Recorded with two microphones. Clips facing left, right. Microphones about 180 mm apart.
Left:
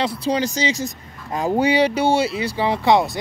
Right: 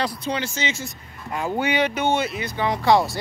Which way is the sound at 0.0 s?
30° left (ahead or behind).